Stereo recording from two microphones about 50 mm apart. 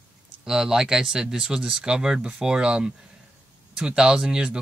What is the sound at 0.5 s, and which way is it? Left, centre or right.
Speech, centre.